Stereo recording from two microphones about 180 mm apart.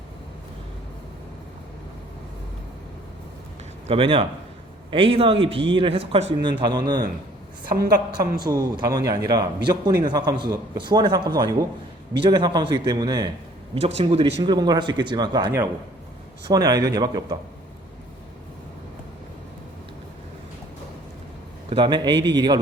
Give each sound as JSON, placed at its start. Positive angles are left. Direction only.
{"t": 3.8, "sound": "a man's voice", "side_deg": -30}
{"t": 7.7, "sound": "a woman's voice", "side_deg": -60}
{"t": 8.4, "sound": "speech", "side_deg": -20}
{"t": 12.2, "sound": "speech", "side_deg": -25}
{"t": 13.8, "sound": "speech", "side_deg": -35}
{"t": 21.7, "sound": "speech", "side_deg": -25}